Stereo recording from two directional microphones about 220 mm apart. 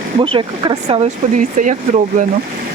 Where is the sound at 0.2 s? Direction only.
25° right (ahead or behind).